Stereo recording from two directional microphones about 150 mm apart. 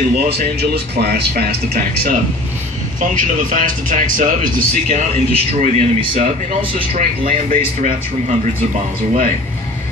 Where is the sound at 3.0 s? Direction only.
60° right (ahead or behind).